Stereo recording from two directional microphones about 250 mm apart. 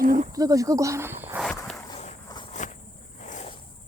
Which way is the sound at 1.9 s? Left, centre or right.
Left.